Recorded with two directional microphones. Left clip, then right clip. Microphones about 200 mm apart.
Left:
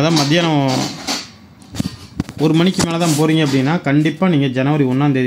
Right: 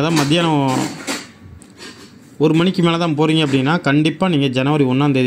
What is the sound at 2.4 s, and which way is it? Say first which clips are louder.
Speech: right 1 dB; 5° left (ahead or behind).